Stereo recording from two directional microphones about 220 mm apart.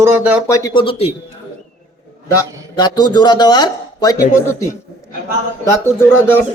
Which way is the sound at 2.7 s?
20° left (ahead or behind).